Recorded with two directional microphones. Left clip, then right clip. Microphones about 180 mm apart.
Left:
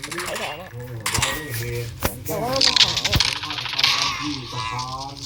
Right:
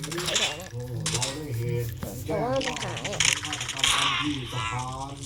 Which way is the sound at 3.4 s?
35° left (ahead or behind).